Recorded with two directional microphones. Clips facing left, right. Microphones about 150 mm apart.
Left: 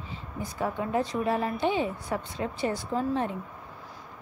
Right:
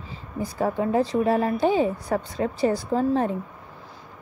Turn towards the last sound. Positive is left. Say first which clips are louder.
# right 6 dB
turn(degrees=-40)  # may be behind; listen again after turning